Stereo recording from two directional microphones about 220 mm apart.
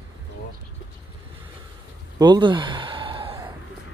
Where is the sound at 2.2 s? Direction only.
20° right (ahead or behind).